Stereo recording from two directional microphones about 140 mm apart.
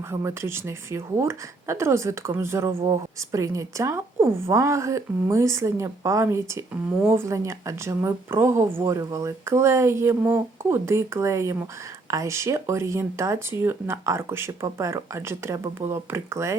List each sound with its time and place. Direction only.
0.1 s speech: 20° right (ahead or behind)